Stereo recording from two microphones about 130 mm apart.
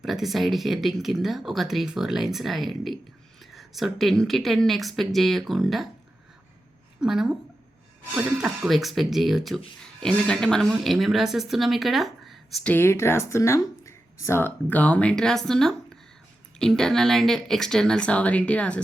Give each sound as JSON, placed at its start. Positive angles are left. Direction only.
{"t": 0.0, "sound": "speech", "side_deg": 0}
{"t": 7.0, "sound": "speech", "side_deg": -5}
{"t": 12.6, "sound": "speech", "side_deg": 15}